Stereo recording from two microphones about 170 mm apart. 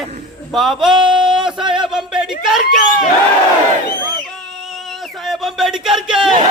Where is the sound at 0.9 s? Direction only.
30° right (ahead or behind).